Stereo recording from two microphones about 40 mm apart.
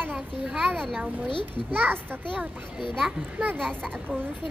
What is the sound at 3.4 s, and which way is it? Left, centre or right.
Speech, right.